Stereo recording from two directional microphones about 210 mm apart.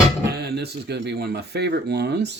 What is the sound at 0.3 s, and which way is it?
Speech, 50° right (ahead or behind).